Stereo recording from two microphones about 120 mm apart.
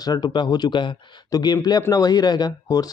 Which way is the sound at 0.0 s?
35° left (ahead or behind).